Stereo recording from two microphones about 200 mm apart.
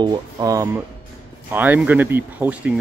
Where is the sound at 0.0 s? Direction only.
15° right (ahead or behind).